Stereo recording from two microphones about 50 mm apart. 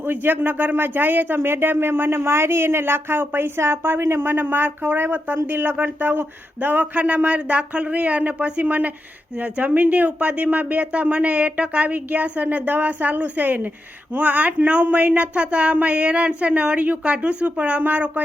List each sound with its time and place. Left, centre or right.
0.0 s speech: right
1.4 s speech: right